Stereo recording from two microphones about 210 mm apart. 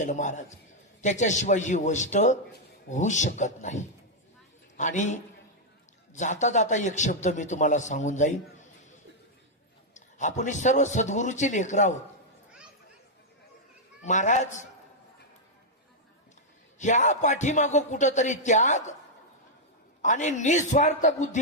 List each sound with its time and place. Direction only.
0.0 s speech: 35° left (ahead or behind)
9.9 s speech: 35° left (ahead or behind)
14.0 s speech: 35° left (ahead or behind)
16.7 s speech: 35° left (ahead or behind)
20.0 s speech: 35° left (ahead or behind)